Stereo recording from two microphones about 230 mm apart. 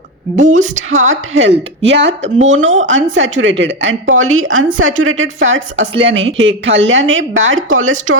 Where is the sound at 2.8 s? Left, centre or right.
Right.